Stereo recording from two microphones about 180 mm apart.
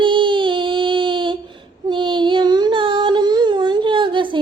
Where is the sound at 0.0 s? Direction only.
25° right (ahead or behind).